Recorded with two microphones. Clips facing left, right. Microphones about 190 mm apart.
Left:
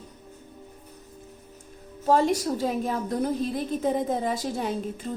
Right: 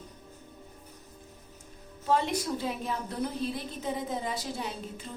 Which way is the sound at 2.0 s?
40° left (ahead or behind).